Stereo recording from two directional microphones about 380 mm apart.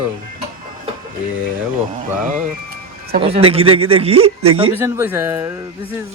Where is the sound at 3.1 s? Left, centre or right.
Centre.